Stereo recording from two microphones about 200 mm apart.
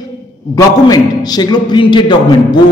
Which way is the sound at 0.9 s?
20° left (ahead or behind).